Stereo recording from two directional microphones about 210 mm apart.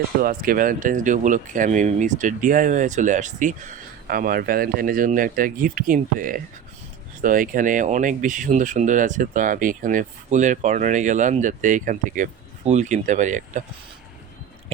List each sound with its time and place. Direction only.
0.2 s speech: 40° right (ahead or behind)